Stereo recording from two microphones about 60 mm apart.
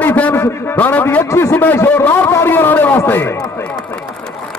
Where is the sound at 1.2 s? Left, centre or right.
Left.